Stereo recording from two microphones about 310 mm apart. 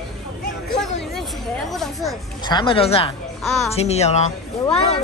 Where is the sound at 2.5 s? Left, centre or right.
Centre.